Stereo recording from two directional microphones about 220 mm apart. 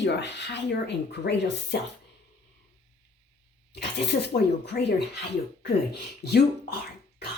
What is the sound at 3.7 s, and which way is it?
Speech, 50° left (ahead or behind).